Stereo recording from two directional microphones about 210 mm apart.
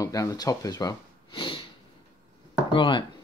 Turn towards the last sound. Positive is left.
turn(degrees=25)  # may be behind; listen again after turning